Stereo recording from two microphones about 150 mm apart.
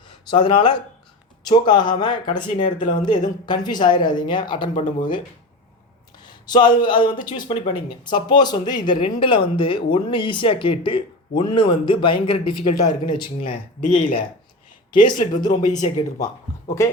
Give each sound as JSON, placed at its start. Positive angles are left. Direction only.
{"t": 0.3, "sound": "speech", "side_deg": 35}
{"t": 6.2, "sound": "speech", "side_deg": 30}
{"t": 13.8, "sound": "speech", "side_deg": 55}
{"t": 14.9, "sound": "speech", "side_deg": 30}